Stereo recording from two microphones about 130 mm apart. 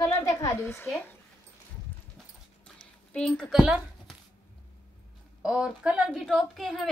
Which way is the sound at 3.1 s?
5° left (ahead or behind).